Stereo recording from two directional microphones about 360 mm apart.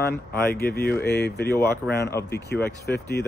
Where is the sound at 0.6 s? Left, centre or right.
Left.